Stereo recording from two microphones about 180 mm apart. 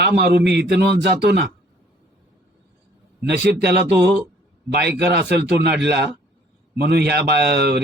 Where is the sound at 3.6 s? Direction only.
65° right (ahead or behind).